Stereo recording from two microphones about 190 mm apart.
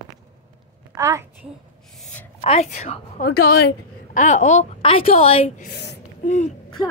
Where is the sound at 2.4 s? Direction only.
30° left (ahead or behind).